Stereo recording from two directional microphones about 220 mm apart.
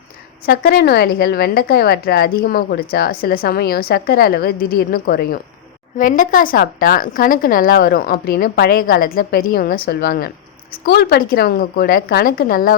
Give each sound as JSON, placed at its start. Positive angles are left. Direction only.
{"t": 0.4, "sound": "a woman's voice", "side_deg": 40}